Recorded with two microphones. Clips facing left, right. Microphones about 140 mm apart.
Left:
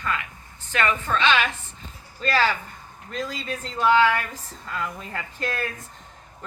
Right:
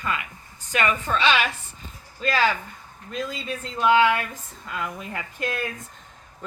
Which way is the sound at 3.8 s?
15° right (ahead or behind).